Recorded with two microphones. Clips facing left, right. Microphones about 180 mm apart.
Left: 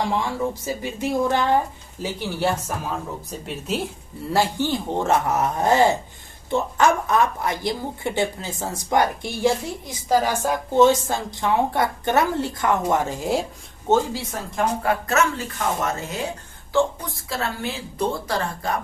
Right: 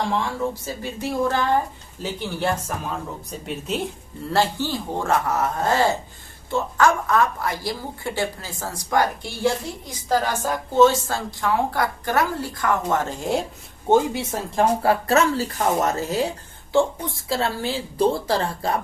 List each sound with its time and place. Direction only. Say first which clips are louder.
0.6 s a woman's voice: left 3 dB; 15° left (ahead or behind)
2.0 s speech: left 1 dB; 5° left (ahead or behind)
4.3 s a woman's voice: left 1 dB; 10° left (ahead or behind)
13.8 s a woman's voice: right 2 dB; 15° right (ahead or behind)